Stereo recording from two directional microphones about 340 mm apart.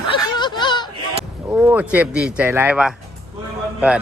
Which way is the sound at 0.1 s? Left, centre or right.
Centre.